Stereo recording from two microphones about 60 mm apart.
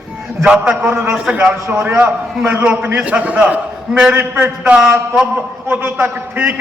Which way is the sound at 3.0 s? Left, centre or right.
Right.